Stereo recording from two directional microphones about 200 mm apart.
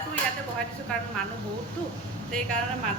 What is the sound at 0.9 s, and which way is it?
Speech, 5° left (ahead or behind).